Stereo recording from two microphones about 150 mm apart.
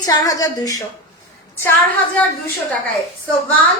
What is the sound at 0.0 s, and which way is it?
Speech, 25° left (ahead or behind).